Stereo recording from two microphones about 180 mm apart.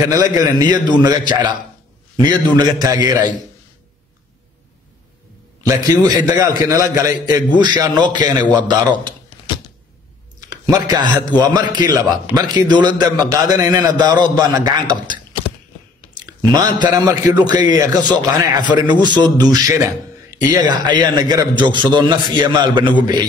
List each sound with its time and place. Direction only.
0.4 s a man's voice: 20° right (ahead or behind)
2.4 s a man's voice: 20° right (ahead or behind)
3.1 s a man's voice: 45° left (ahead or behind)
5.6 s a man's voice: 20° right (ahead or behind)
10.7 s a man's voice: 25° right (ahead or behind)
16.2 s a man's voice: 25° right (ahead or behind)